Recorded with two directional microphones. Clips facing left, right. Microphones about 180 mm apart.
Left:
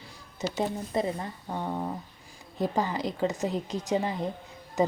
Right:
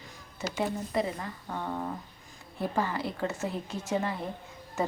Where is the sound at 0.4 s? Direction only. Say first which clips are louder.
Left 2 dB; 15° left (ahead or behind).